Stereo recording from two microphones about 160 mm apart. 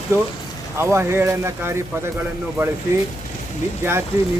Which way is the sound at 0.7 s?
15° right (ahead or behind).